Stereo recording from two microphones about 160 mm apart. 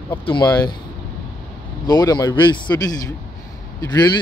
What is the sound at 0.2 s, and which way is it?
Speech, 30° left (ahead or behind).